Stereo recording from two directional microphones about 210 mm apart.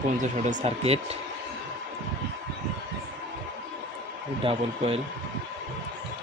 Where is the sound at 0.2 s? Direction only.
35° right (ahead or behind).